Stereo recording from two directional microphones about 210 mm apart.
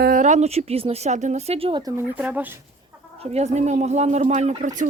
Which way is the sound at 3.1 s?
30° right (ahead or behind).